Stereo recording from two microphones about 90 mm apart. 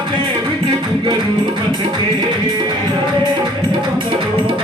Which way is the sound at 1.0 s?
60° right (ahead or behind).